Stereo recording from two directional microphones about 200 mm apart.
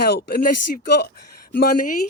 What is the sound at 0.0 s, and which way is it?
Speech, 50° left (ahead or behind).